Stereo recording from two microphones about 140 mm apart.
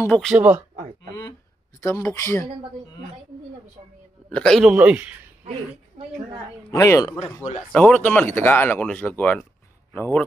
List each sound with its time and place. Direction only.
0.4 s speech: 15° right (ahead or behind)
0.7 s a sound: 70° right (ahead or behind)
1.8 s speech: 20° left (ahead or behind)
4.3 s a man's voice: 5° left (ahead or behind)
4.7 s speech: 10° right (ahead or behind)
6.7 s speech: 20° left (ahead or behind)
7.7 s speech: 10° left (ahead or behind)